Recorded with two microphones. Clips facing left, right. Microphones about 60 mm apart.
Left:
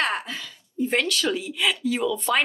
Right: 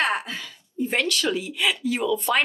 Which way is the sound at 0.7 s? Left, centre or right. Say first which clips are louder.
Left 1 dB; centre.